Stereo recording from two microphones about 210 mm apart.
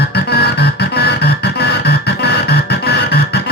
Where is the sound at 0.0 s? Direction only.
50° left (ahead or behind).